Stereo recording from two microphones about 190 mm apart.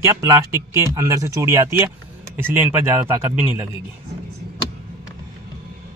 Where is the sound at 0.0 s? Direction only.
15° right (ahead or behind).